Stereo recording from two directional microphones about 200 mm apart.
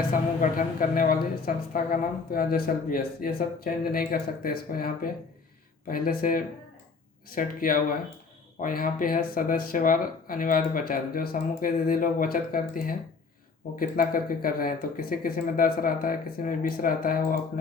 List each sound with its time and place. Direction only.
0.0 s a woman's voice: 45° left (ahead or behind)